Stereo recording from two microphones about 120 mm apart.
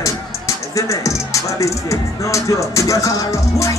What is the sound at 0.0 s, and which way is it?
Music, 25° left (ahead or behind).